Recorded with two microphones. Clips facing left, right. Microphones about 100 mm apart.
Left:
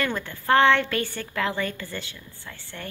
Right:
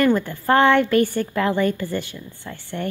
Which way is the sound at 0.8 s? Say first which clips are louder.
Right 9 dB; 45° right (ahead or behind).